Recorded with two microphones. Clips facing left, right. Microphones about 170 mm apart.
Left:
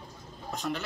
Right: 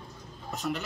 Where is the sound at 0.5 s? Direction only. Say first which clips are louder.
Right 1 dB; centre (ahead or behind).